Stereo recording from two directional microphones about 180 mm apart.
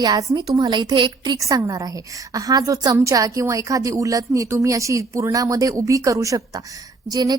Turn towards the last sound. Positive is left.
turn(degrees=-20)  # may be behind; listen again after turning